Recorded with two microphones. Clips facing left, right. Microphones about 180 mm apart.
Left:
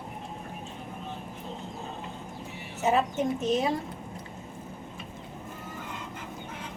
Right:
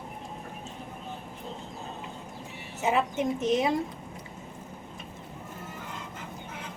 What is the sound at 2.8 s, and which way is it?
Speech, 15° right (ahead or behind).